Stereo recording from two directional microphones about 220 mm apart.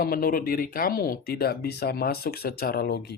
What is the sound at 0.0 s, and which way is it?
Speech, 40° left (ahead or behind).